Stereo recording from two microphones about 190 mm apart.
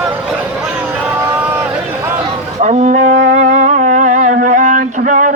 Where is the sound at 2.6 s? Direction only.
40° right (ahead or behind).